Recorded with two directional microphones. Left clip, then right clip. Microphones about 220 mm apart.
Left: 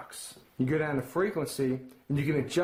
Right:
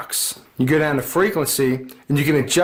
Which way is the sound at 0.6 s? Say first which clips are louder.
Right 11 dB; 35° right (ahead or behind).